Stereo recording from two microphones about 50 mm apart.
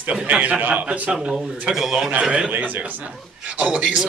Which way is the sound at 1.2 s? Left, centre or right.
Centre.